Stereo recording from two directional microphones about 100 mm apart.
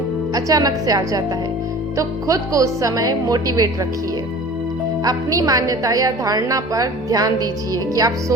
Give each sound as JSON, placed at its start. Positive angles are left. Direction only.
{"t": 0.3, "sound": "a woman's voice", "side_deg": -35}
{"t": 5.0, "sound": "a woman's voice", "side_deg": -35}